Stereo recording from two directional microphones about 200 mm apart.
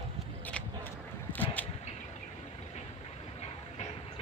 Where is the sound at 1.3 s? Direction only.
10° left (ahead or behind).